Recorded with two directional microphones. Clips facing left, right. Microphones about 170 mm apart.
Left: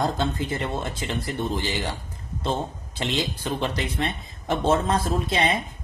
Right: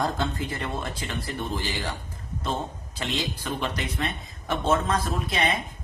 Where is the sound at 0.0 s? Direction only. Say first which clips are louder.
Left 2 dB; 20° left (ahead or behind).